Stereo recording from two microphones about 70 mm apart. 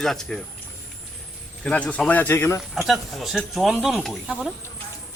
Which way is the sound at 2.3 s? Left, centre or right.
Left.